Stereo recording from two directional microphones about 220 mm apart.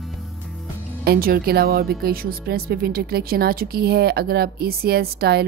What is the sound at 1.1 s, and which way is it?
Speech, 45° right (ahead or behind).